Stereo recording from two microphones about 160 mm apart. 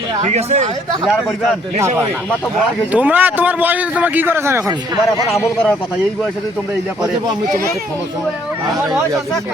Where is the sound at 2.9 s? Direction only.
10° right (ahead or behind).